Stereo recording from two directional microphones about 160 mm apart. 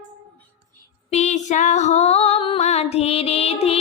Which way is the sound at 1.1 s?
45° left (ahead or behind).